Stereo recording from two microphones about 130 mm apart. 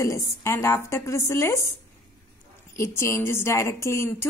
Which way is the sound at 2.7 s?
20° left (ahead or behind).